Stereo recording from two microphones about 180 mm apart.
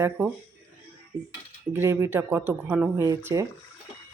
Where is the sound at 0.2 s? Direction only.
10° right (ahead or behind).